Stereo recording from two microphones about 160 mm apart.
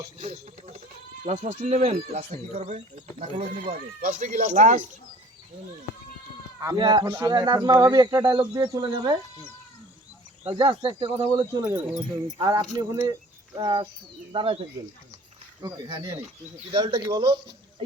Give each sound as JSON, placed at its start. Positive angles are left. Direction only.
{"t": 0.2, "sound": "speech", "side_deg": -40}
{"t": 6.7, "sound": "speech", "side_deg": -25}
{"t": 10.4, "sound": "speech", "side_deg": -35}
{"t": 15.6, "sound": "speech", "side_deg": -25}